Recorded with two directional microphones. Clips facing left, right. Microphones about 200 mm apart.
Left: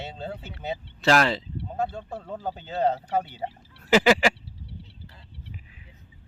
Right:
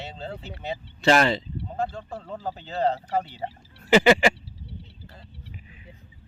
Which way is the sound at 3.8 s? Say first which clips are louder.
Right 2 dB; centre (ahead or behind).